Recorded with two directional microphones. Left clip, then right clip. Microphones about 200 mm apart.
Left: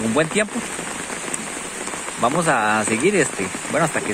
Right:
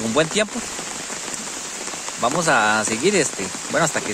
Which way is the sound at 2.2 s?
10° right (ahead or behind).